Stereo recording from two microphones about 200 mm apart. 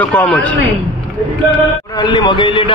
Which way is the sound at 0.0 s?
5° left (ahead or behind).